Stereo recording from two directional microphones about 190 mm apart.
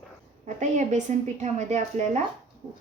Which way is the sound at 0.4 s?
40° right (ahead or behind).